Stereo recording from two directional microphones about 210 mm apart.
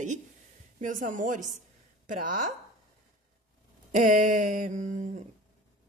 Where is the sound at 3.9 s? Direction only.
40° right (ahead or behind).